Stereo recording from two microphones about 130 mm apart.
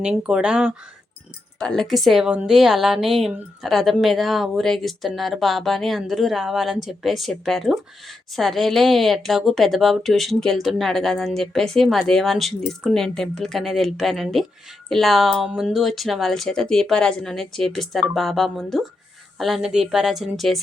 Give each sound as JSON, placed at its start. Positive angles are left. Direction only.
{"t": 0.0, "sound": "speech", "side_deg": -10}
{"t": 1.5, "sound": "a woman's voice", "side_deg": 5}